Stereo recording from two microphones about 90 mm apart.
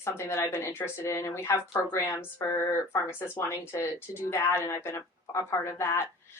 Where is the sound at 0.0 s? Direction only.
30° left (ahead or behind).